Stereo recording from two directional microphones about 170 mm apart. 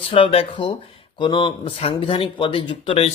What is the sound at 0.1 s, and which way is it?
Speech, 30° left (ahead or behind).